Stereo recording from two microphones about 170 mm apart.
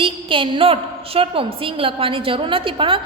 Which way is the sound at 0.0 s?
30° right (ahead or behind).